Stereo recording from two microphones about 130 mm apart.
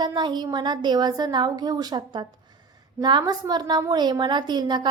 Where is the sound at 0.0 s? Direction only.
35° right (ahead or behind).